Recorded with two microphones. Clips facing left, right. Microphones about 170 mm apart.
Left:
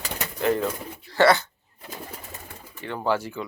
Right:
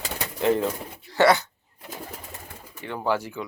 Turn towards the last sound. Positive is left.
turn(degrees=-15)  # may be behind; listen again after turning